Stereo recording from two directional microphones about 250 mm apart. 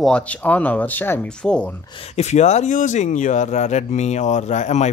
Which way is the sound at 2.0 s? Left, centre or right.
Left.